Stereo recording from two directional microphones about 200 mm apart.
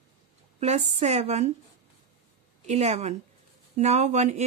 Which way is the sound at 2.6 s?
35° right (ahead or behind).